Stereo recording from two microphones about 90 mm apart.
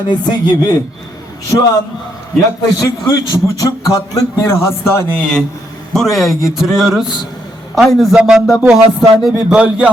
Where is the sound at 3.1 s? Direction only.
35° left (ahead or behind).